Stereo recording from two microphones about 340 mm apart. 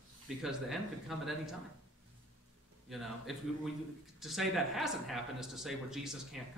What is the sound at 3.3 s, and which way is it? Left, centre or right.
Speech, centre.